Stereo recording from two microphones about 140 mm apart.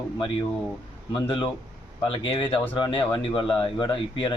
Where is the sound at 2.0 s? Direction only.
40° left (ahead or behind).